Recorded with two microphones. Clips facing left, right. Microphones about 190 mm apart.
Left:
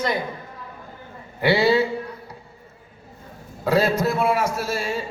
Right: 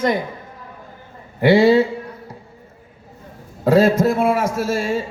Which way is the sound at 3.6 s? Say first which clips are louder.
Right 6 dB; 45° right (ahead or behind).